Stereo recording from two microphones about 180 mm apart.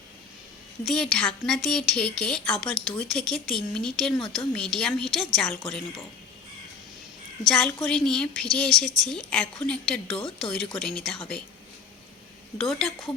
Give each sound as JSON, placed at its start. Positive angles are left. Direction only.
{"t": 0.9, "sound": "a woman's voice", "side_deg": 0}
{"t": 7.4, "sound": "a woman's voice", "side_deg": 5}
{"t": 12.5, "sound": "a woman's voice", "side_deg": 0}